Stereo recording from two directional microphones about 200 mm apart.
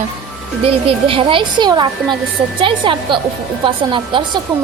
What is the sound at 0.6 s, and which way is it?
A woman's voice, 30° right (ahead or behind).